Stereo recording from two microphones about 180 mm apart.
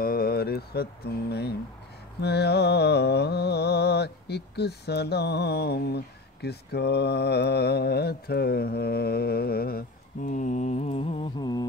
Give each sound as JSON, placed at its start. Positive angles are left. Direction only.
{"t": 0.0, "sound": "mantra", "side_deg": 55}